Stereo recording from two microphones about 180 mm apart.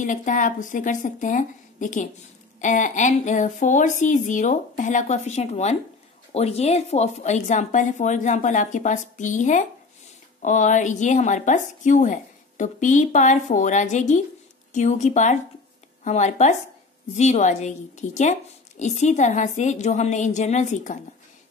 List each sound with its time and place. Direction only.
0.0 s a woman's voice: 45° left (ahead or behind)